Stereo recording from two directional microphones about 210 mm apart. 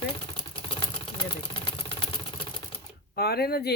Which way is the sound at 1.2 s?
25° left (ahead or behind).